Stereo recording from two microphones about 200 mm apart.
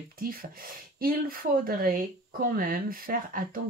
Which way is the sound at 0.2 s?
45° right (ahead or behind).